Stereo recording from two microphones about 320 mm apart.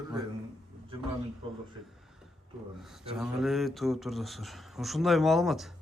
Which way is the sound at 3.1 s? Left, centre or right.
Centre.